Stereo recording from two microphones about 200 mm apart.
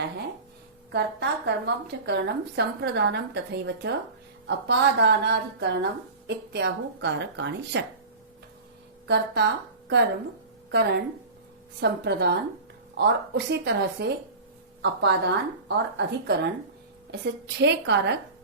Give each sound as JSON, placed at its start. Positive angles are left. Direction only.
{"t": 0.9, "sound": "a woman's voice", "side_deg": -60}
{"t": 9.0, "sound": "a woman's voice", "side_deg": -55}
{"t": 10.7, "sound": "a woman's voice", "side_deg": -55}